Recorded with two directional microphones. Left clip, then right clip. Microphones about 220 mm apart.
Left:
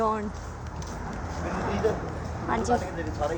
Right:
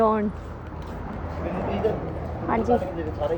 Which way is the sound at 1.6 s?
40° left (ahead or behind).